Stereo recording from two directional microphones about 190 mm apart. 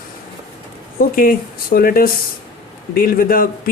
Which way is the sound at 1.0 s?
50° left (ahead or behind).